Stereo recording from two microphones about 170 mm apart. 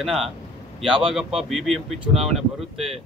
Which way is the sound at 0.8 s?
30° right (ahead or behind).